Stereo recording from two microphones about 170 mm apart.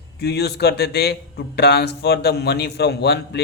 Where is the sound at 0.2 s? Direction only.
75° left (ahead or behind).